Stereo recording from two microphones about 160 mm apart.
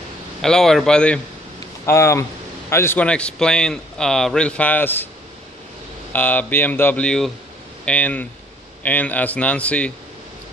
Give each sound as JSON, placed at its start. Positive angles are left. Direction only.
{"t": 0.4, "sound": "speech", "side_deg": 5}
{"t": 1.9, "sound": "a man's voice", "side_deg": 15}
{"t": 6.1, "sound": "a man's voice", "side_deg": 10}